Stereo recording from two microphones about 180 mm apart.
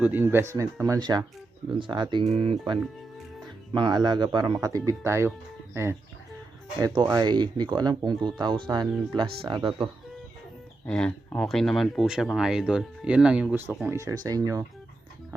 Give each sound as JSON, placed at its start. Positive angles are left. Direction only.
{"t": 0.0, "sound": "speech", "side_deg": -10}
{"t": 10.8, "sound": "speech", "side_deg": 5}